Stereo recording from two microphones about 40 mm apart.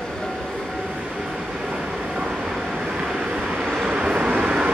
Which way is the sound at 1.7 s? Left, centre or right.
Centre.